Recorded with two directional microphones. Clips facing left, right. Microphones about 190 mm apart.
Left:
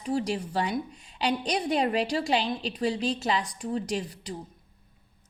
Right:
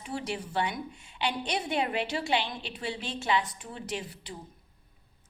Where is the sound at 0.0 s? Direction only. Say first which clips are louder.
Left 7 dB; 35° left (ahead or behind).